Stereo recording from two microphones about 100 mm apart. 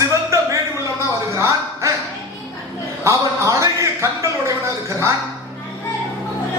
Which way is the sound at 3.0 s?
30° right (ahead or behind).